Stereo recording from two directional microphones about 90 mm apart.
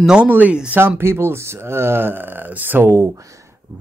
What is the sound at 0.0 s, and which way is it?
Speech, 10° right (ahead or behind).